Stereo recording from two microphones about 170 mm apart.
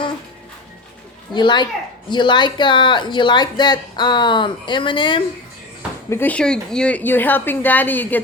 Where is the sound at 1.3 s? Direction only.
25° left (ahead or behind).